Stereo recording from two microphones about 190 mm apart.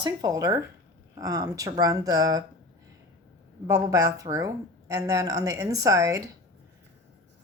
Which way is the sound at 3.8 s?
15° right (ahead or behind).